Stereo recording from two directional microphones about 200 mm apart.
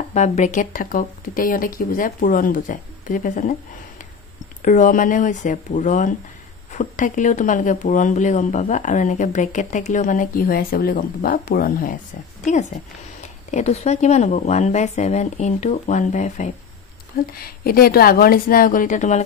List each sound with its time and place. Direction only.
0.1 s speech: 35° left (ahead or behind)
4.6 s speech: 40° left (ahead or behind)
12.4 s speech: 35° left (ahead or behind)
17.3 s speech: 50° left (ahead or behind)